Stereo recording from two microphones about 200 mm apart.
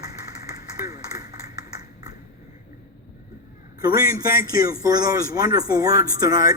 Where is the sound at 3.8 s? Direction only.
20° right (ahead or behind).